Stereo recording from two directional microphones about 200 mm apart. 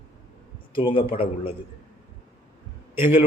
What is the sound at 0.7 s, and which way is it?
Speech, 25° left (ahead or behind).